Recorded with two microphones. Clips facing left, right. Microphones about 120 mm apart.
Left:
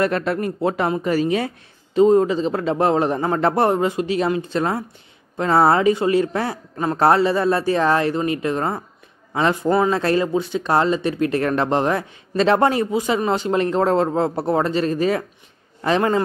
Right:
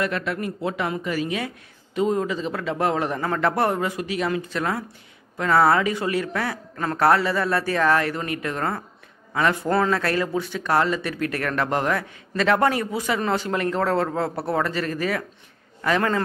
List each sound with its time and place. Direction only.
0.0 s speech: 35° left (ahead or behind)